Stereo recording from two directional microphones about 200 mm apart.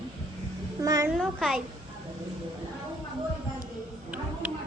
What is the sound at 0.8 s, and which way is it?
Speech, 15° right (ahead or behind).